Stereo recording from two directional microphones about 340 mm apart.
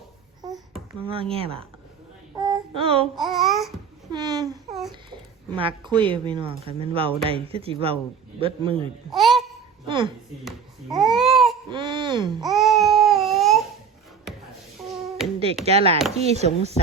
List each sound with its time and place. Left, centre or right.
1.0 s speech: centre
2.3 s a sound: centre
3.2 s speech: centre
4.1 s speech: centre
4.7 s babbling: centre
5.5 s speech: centre
9.1 s a sound: centre
9.8 s a sound: centre
10.9 s babbling: centre
11.7 s baby cry: centre
12.3 s baby cry: centre
15.6 s speech: centre
16.1 s chopping: centre